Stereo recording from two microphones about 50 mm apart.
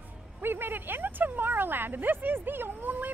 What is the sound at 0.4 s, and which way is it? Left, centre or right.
Speech, right.